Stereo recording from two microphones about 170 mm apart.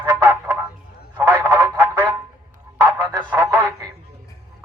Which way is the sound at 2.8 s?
15° right (ahead or behind).